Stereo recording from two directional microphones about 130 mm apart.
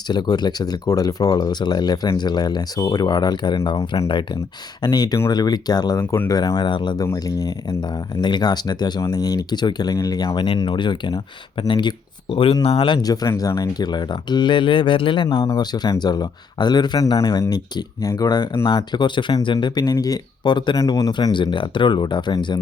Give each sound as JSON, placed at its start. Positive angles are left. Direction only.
{"t": 0.1, "sound": "speech", "side_deg": 35}
{"t": 3.6, "sound": "speech", "side_deg": 50}
{"t": 4.8, "sound": "speech", "side_deg": 30}